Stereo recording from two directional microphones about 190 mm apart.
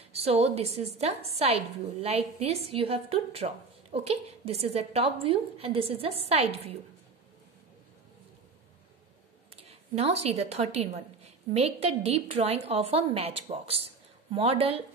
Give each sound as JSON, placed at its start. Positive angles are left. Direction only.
{"t": 0.0, "sound": "a woman's voice", "side_deg": -30}
{"t": 9.6, "sound": "a woman's voice", "side_deg": -30}